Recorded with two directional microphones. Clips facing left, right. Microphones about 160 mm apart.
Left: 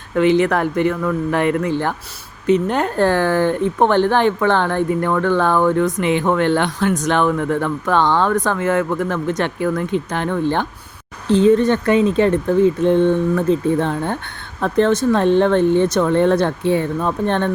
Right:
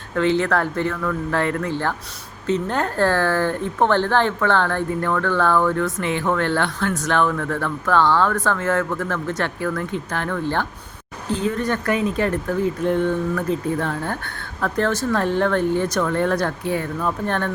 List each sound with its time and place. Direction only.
0.2 s speech: 15° left (ahead or behind)